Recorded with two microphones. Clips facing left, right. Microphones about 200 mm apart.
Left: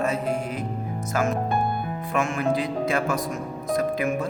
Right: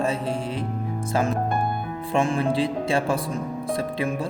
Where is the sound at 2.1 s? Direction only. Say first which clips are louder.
Right 2 dB; 30° right (ahead or behind).